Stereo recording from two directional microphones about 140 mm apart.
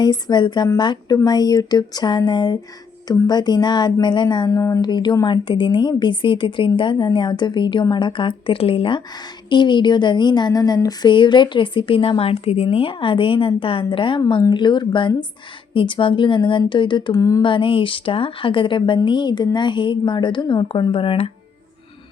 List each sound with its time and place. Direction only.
0.0 s speech: 30° left (ahead or behind)
17.4 s speech: 35° left (ahead or behind)